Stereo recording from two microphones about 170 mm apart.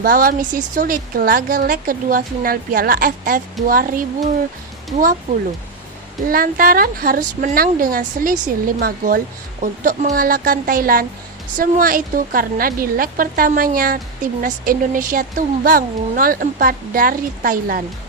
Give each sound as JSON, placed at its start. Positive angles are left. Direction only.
{"t": 0.0, "sound": "a woman's voice", "side_deg": -55}
{"t": 6.3, "sound": "a woman's voice", "side_deg": -55}